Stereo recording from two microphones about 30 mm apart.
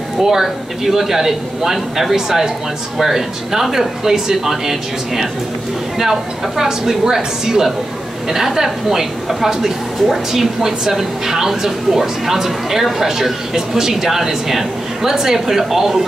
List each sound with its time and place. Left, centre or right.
0.2 s a woman's voice: centre